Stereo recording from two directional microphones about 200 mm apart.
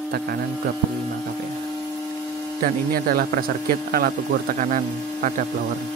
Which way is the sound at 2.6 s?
50° right (ahead or behind).